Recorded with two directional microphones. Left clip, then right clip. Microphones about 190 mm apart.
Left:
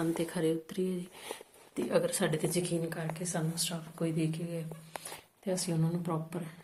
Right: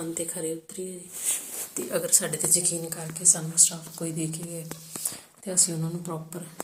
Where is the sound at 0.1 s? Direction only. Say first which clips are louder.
Even; 20° left (ahead or behind).